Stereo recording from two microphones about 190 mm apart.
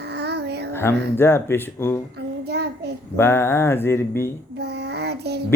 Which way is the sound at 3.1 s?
15° left (ahead or behind).